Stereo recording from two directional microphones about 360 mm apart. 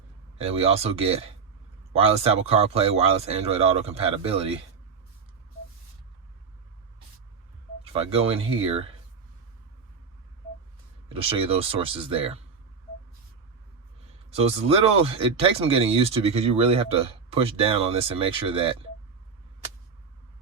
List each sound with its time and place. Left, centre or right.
0.3 s speech: centre
7.9 s speech: centre
11.1 s speech: centre
14.3 s speech: centre